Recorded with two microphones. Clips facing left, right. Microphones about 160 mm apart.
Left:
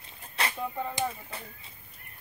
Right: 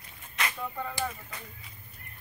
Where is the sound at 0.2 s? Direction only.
30° left (ahead or behind).